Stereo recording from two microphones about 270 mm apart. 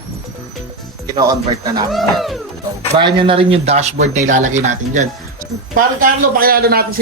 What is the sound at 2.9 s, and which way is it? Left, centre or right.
A man's voice, centre.